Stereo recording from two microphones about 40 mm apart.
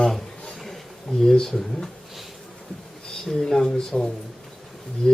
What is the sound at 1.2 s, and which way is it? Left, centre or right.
Speech, centre.